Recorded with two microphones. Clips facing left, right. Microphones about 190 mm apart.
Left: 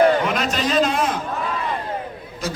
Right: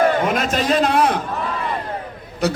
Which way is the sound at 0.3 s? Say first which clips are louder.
Right 3 dB; 45° right (ahead or behind).